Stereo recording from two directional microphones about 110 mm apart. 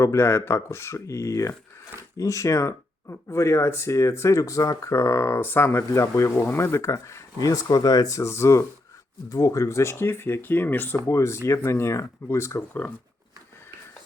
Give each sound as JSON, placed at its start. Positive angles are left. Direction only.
{"t": 0.0, "sound": "speech", "side_deg": 25}